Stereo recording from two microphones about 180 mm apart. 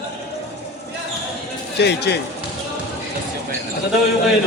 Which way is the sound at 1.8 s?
65° left (ahead or behind).